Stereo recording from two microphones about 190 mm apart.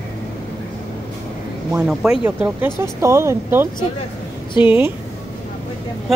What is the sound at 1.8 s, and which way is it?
Speech, 5° right (ahead or behind).